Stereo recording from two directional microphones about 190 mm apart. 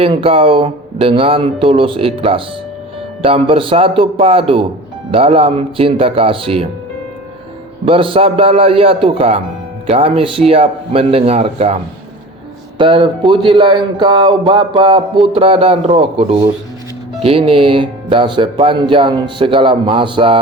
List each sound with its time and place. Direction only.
0.0 s speech: 30° right (ahead or behind)
7.9 s speech: 30° right (ahead or behind)
12.8 s speech: 25° right (ahead or behind)